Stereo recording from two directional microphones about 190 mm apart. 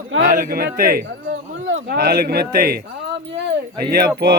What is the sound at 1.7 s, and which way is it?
Speech, 70° right (ahead or behind).